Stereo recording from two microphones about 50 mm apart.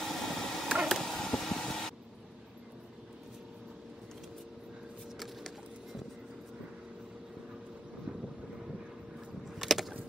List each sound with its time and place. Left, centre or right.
0.0 s a sound: centre
1.3 s vehicle: centre
9.6 s boat: centre